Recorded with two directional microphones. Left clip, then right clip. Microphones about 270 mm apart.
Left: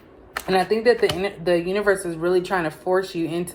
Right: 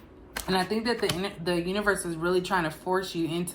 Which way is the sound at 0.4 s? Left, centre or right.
Centre.